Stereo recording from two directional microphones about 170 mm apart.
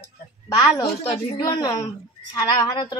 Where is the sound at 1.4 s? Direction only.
25° left (ahead or behind).